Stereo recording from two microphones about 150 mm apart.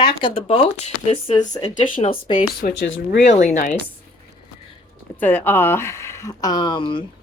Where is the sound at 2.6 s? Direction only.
90° left.